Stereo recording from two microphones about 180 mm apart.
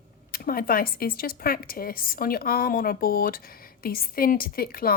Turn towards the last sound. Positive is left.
turn(degrees=55)  # may be behind; listen again after turning